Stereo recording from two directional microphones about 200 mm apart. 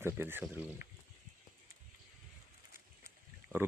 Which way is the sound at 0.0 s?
10° right (ahead or behind).